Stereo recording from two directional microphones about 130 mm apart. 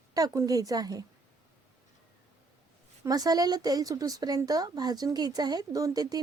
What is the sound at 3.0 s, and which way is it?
Speech, 30° right (ahead or behind).